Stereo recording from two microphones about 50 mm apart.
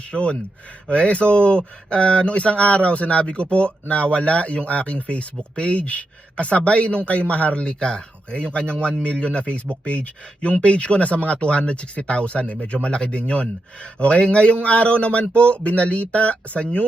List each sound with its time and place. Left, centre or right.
0.1 s speech: left